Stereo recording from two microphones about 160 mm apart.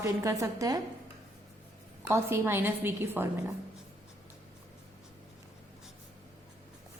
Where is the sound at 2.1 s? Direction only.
15° right (ahead or behind).